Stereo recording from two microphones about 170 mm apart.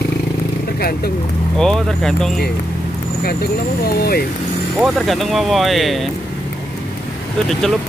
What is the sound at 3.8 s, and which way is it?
Speech, 65° left (ahead or behind).